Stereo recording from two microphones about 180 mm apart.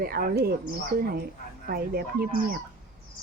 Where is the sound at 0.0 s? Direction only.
55° right (ahead or behind).